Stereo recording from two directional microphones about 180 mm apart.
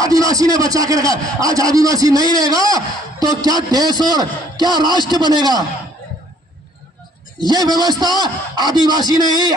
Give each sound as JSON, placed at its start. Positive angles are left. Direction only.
{"t": 0.0, "sound": "a man's voice", "side_deg": -20}
{"t": 7.3, "sound": "a man's voice", "side_deg": -20}